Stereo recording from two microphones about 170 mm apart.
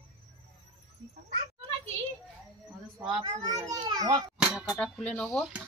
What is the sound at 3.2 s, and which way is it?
A child's voice, 20° right (ahead or behind).